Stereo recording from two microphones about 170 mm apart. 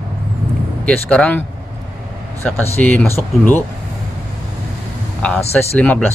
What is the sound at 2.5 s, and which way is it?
Speech, 10° left (ahead or behind).